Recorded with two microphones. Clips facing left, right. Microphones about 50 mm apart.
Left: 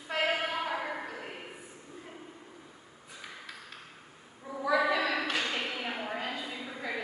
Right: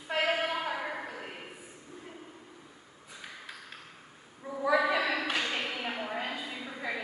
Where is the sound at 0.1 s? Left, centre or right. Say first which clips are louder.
Right 1 dB; centre.